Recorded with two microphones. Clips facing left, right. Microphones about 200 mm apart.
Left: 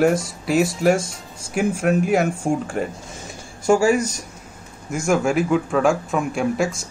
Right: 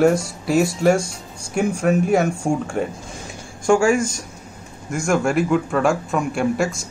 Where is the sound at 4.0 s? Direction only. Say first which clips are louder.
Right 1 dB; 45° right (ahead or behind).